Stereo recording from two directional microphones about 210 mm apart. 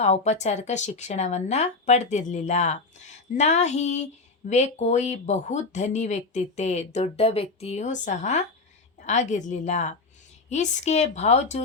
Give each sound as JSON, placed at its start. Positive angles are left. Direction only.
{"t": 0.0, "sound": "speech", "side_deg": 30}